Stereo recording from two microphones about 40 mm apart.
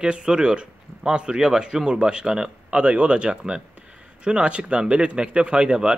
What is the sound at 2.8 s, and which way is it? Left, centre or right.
Speech, right.